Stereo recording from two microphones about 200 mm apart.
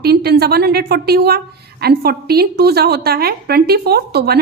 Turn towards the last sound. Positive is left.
turn(degrees=-50)  # may be behind; listen again after turning